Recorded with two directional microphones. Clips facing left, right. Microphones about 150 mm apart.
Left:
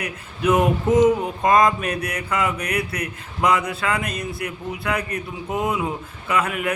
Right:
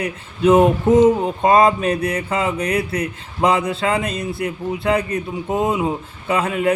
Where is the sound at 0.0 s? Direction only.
25° right (ahead or behind).